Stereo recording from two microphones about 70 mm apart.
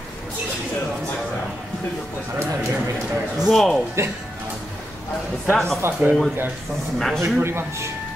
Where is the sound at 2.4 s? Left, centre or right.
Right.